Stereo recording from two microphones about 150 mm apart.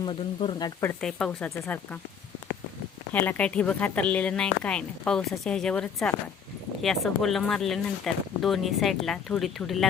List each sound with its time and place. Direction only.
0.0 s speech: 35° left (ahead or behind)
0.8 s a woman's voice: 10° left (ahead or behind)
3.1 s a woman's voice: 10° left (ahead or behind)